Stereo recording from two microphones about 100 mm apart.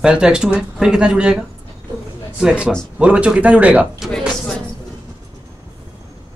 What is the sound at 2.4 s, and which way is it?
Speech, 10° right (ahead or behind).